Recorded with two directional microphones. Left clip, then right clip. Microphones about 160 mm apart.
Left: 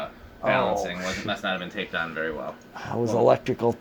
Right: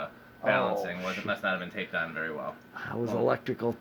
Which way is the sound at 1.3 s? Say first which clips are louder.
Even; 45° right (ahead or behind).